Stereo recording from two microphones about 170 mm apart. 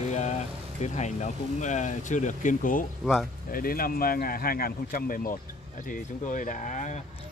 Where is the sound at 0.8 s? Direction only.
45° left (ahead or behind).